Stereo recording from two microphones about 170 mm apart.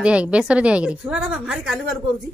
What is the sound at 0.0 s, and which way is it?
A woman's voice, 5° right (ahead or behind).